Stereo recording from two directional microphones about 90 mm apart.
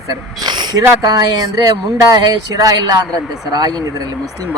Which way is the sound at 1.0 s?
45° right (ahead or behind).